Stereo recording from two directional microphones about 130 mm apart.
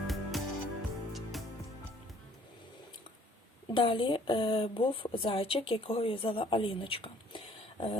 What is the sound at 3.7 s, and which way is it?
Speech, 40° left (ahead or behind).